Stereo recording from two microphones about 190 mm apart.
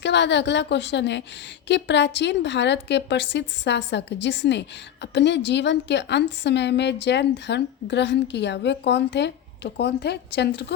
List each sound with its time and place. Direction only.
0.0 s a woman's voice: 65° left (ahead or behind)